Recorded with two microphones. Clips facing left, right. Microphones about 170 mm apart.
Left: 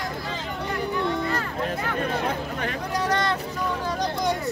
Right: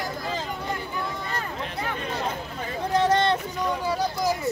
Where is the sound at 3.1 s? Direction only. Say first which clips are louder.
Right 1 dB; 25° right (ahead or behind).